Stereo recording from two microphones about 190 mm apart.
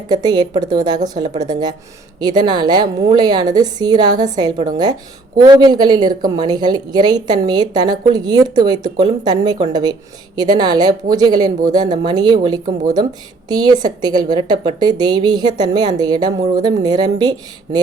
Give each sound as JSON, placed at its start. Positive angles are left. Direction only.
{"t": 0.1, "sound": "a woman's voice", "side_deg": -20}